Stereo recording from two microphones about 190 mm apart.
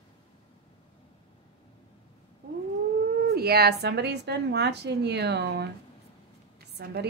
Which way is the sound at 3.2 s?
55° right (ahead or behind).